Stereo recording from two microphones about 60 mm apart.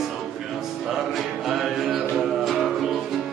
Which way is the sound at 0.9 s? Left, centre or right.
Centre.